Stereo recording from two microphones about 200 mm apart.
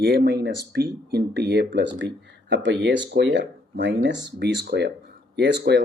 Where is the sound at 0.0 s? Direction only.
55° right (ahead or behind).